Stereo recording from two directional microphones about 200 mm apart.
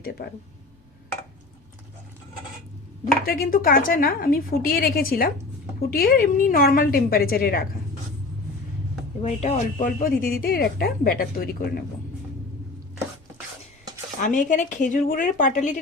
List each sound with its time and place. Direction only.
3.2 s a woman's voice: 45° left (ahead or behind)
9.2 s speech: 35° left (ahead or behind)
9.8 s a woman's voice: 45° left (ahead or behind)
14.2 s speech: 40° left (ahead or behind)